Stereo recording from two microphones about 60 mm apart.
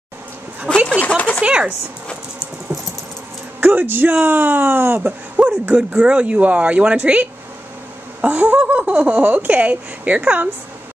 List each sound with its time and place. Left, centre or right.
0.7 s a sound: centre
0.9 s speech: left
1.4 s speech: centre
2.7 s rodents: right
3.6 s speech: right
5.4 s a sound: right
5.8 s speech: centre